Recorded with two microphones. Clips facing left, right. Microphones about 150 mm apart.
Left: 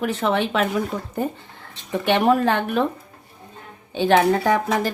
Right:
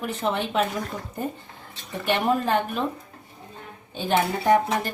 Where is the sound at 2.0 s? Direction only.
75° left (ahead or behind).